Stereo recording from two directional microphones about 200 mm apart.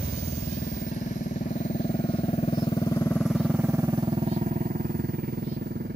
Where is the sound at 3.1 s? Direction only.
Centre (ahead or behind).